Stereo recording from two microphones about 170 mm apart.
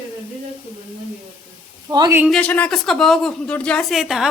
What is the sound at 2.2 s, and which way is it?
Speech, 5° left (ahead or behind).